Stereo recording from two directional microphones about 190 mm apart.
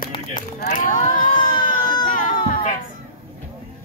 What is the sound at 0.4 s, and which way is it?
Speech, 45° left (ahead or behind).